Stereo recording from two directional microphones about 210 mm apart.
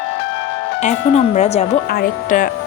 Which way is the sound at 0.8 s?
35° left (ahead or behind).